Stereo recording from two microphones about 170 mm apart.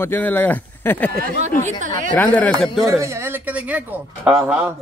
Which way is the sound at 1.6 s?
45° right (ahead or behind).